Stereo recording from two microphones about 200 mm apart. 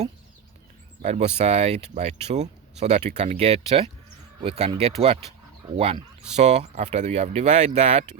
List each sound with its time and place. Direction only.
1.0 s speech: 35° right (ahead or behind)